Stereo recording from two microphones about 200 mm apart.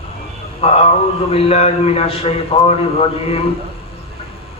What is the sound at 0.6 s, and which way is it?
A man's voice, 30° left (ahead or behind).